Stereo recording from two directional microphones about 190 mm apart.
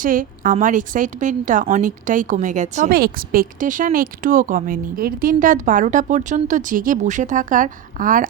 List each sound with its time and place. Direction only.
0.0 s speech: 45° right (ahead or behind)